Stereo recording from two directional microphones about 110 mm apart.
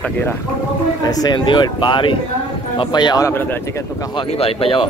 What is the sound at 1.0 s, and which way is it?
Speech, 35° left (ahead or behind).